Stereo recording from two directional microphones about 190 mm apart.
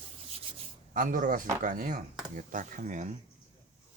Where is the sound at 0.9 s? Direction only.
45° right (ahead or behind).